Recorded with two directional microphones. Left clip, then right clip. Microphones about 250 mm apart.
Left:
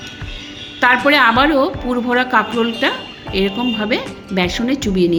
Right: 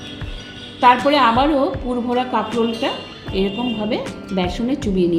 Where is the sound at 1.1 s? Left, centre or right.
Left.